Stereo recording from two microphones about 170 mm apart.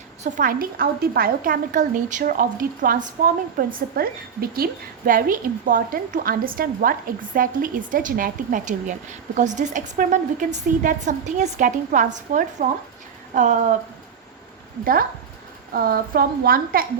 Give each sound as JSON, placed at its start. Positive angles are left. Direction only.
{"t": 0.2, "sound": "a woman's voice", "side_deg": -50}
{"t": 15.7, "sound": "a woman's voice", "side_deg": -60}